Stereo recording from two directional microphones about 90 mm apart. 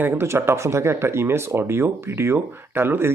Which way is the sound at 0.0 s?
30° right (ahead or behind).